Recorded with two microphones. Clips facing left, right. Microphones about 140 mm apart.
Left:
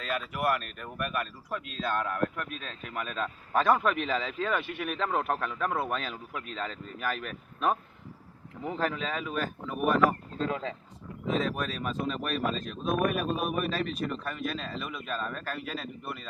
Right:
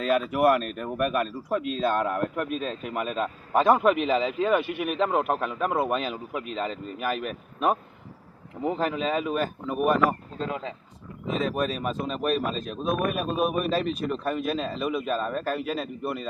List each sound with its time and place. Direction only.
0.4 s speech: 30° right (ahead or behind)